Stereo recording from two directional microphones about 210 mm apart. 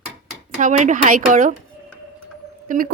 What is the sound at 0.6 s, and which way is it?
Speech, 35° right (ahead or behind).